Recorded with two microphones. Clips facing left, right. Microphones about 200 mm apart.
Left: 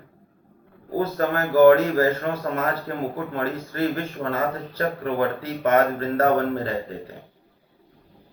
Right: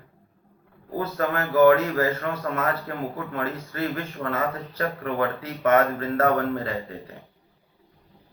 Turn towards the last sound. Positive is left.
turn(degrees=30)  # may be behind; listen again after turning